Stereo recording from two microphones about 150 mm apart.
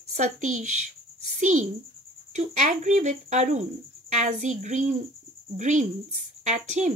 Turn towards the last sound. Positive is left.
turn(degrees=-50)  # may be behind; listen again after turning